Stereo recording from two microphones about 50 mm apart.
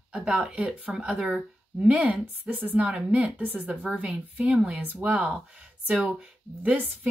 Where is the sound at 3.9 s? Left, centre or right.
Centre.